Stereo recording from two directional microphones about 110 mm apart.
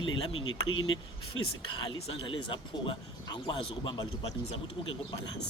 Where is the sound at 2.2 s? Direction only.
50° left (ahead or behind).